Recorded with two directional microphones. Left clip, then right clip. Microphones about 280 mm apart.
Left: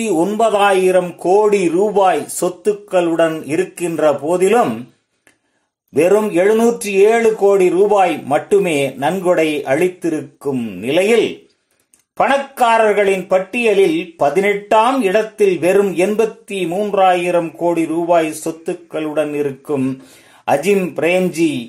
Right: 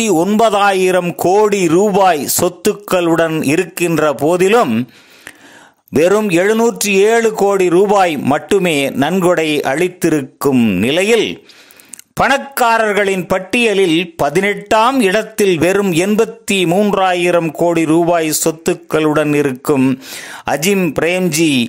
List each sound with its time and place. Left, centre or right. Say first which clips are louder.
0.4 s speech: even; right
5.9 s speech: right 1 dB; right